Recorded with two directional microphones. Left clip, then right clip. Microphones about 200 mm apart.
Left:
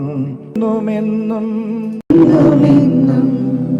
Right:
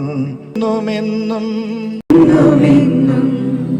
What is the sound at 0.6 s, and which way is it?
Music, 50° left (ahead or behind).